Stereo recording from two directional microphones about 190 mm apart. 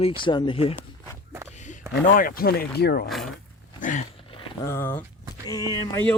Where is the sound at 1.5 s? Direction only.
40° left (ahead or behind); by 3.0 s 55° left (ahead or behind).